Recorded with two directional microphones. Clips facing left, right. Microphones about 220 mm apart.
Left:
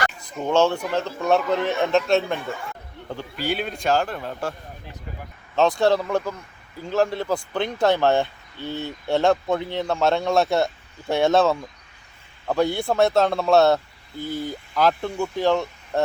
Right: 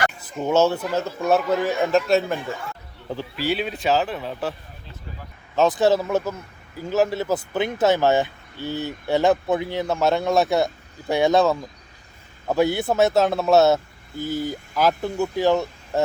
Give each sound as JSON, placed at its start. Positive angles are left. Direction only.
{"t": 0.2, "sound": "speech", "side_deg": -5}
{"t": 5.5, "sound": "speech", "side_deg": -5}